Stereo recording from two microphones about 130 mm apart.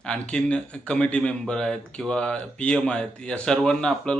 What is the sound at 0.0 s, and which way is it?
A man's voice, 5° left (ahead or behind).